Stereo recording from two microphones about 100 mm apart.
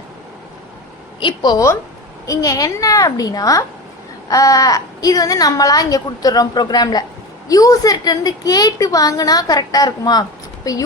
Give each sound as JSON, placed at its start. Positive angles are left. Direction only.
{"t": 1.2, "sound": "a woman's voice", "side_deg": 45}